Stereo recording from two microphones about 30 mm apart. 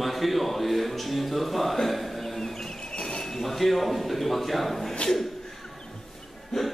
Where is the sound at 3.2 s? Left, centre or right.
Centre.